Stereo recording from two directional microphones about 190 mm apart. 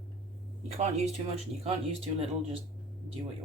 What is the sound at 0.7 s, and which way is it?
Speech, 35° right (ahead or behind).